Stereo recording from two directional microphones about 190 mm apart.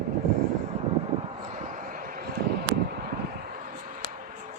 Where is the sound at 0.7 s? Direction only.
35° right (ahead or behind).